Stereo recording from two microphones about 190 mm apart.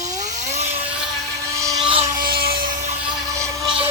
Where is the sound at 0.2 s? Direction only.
40° right (ahead or behind).